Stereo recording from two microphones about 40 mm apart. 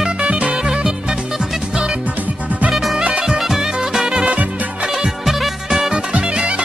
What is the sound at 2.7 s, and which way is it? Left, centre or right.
Music, centre.